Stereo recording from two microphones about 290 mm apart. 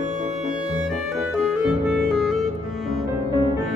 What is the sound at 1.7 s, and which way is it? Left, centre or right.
Clarinet, centre.